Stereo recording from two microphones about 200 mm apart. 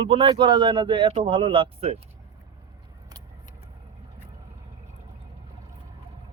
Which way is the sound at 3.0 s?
20° right (ahead or behind).